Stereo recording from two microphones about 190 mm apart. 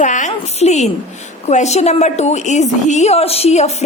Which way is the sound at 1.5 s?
35° left (ahead or behind).